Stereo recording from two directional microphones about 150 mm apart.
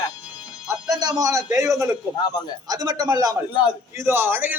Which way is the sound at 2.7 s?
25° right (ahead or behind).